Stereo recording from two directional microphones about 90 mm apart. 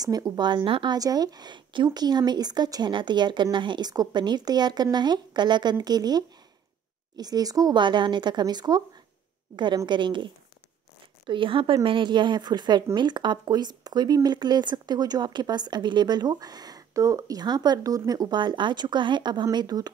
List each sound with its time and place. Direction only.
0.0 s speech: 45° right (ahead or behind); by 0.9 s 65° right (ahead or behind)
0.9 s speech: 45° right (ahead or behind)
7.8 s speech: 60° right (ahead or behind)
9.8 s speech: 60° right (ahead or behind)
19.5 s speech: 50° right (ahead or behind)